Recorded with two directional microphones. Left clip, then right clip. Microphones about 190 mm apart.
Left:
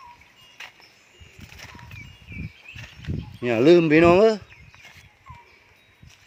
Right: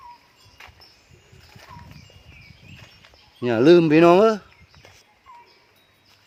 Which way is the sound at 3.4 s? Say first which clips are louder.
Right 1 dB; 15° right (ahead or behind).